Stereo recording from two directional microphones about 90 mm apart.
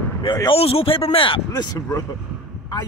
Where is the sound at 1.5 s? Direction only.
50° left (ahead or behind).